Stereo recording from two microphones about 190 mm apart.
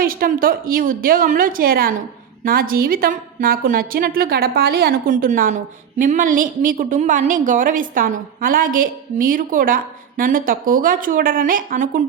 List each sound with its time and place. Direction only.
0.0 s a woman's voice: 50° right (ahead or behind)